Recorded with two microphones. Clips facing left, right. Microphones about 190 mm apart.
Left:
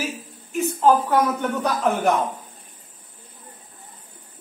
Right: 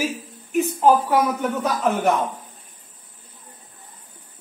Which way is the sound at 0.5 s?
10° right (ahead or behind).